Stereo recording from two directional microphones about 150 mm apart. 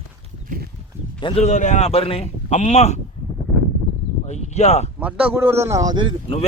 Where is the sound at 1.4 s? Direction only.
55° left (ahead or behind).